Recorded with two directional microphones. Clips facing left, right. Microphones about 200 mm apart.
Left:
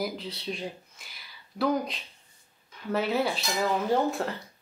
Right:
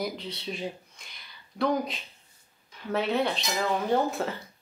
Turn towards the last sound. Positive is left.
turn(degrees=0)  # may be behind; listen again after turning